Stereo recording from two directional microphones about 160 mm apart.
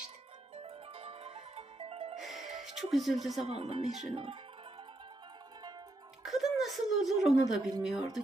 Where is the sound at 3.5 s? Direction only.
35° right (ahead or behind).